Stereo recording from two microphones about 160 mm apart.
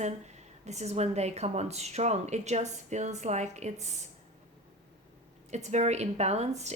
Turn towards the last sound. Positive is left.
turn(degrees=-45)  # may be behind; listen again after turning